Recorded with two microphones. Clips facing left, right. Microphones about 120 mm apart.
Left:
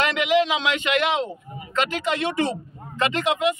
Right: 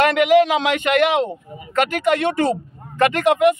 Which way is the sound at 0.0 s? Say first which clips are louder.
Right 7 dB; 50° right (ahead or behind).